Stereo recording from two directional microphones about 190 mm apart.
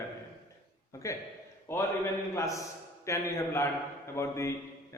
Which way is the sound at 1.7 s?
15° left (ahead or behind).